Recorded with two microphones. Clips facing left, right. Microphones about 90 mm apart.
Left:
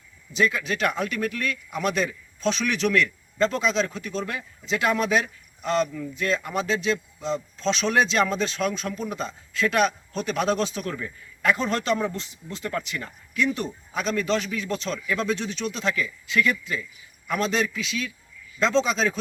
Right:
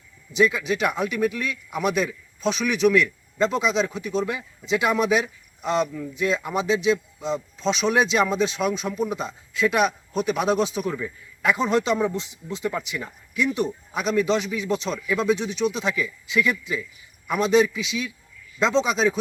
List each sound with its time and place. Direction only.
0.3 s speech: 15° right (ahead or behind)